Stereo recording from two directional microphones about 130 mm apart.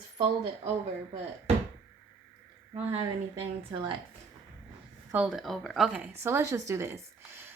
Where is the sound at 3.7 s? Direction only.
40° right (ahead or behind).